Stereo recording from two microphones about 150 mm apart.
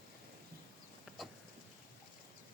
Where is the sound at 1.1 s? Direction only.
5° right (ahead or behind).